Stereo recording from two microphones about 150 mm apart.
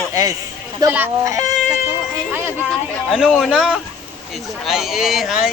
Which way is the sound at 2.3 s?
15° right (ahead or behind).